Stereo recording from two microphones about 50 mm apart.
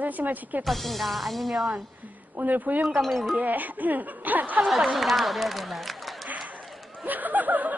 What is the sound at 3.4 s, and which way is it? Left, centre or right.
A woman's voice, right.